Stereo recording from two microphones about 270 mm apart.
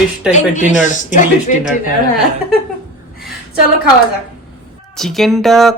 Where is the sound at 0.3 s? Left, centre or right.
Left.